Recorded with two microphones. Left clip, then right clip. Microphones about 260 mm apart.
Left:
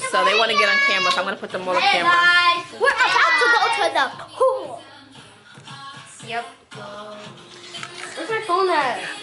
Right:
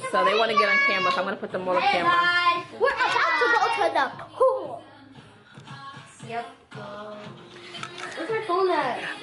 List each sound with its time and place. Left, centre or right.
0.1 s a child's voice: centre
4.4 s a sound: right
5.7 s music: centre
6.8 s music: right
7.2 s music: centre